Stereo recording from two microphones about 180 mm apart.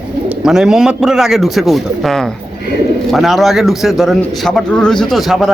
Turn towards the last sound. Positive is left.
turn(degrees=0)  # may be behind; listen again after turning